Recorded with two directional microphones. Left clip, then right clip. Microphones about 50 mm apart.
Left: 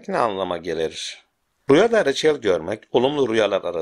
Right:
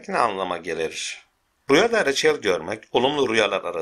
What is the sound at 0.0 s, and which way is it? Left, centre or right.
Speech, left.